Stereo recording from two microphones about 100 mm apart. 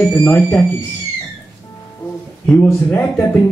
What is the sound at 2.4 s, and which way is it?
Speech, 15° left (ahead or behind).